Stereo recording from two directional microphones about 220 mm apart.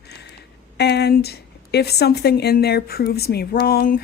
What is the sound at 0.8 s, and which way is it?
A woman's voice, 50° left (ahead or behind).